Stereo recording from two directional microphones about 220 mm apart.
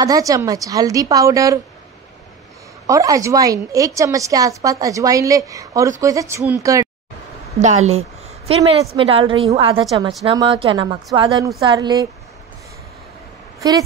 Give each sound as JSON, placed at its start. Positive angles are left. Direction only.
{"t": 0.0, "sound": "a woman's voice", "side_deg": -15}
{"t": 2.9, "sound": "a woman's voice", "side_deg": -15}
{"t": 7.6, "sound": "a woman's voice", "side_deg": -30}
{"t": 13.6, "sound": "speech", "side_deg": -15}